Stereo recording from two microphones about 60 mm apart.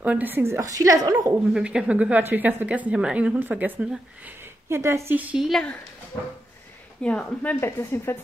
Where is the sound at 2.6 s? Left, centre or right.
Right.